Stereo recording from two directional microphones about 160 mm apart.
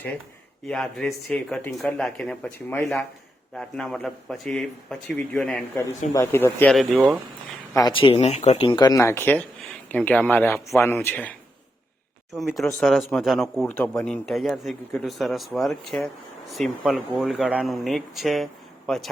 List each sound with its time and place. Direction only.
0.7 s speech: 5° left (ahead or behind)
6.7 s speech: centre (ahead or behind)
7.7 s speech: 20° left (ahead or behind)
7.9 s speech: 35° left (ahead or behind); by 11.3 s 10° left (ahead or behind)
12.3 s speech: centre (ahead or behind)